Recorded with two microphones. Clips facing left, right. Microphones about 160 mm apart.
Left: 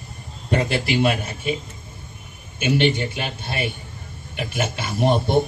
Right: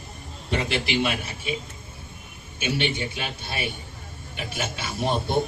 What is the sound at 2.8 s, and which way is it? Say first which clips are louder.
A man's voice: left 7 dB; 50° left (ahead or behind).